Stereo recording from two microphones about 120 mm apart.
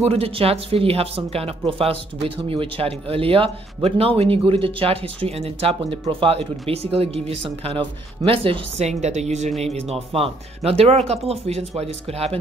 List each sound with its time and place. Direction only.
0.0 s speech: 55° right (ahead or behind)
9.8 s speech: 60° right (ahead or behind)